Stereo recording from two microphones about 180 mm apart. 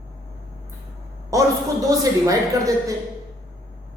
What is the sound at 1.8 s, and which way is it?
Speech, 20° right (ahead or behind).